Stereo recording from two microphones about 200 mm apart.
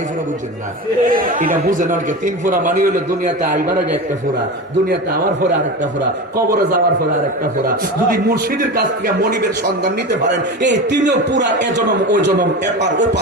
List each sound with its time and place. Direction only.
1.0 s a man's voice: 45° right (ahead or behind)
6.3 s a man's voice: 45° right (ahead or behind)
8.1 s a man's voice: 50° right (ahead or behind)
10.3 s a man's voice: 60° right (ahead or behind)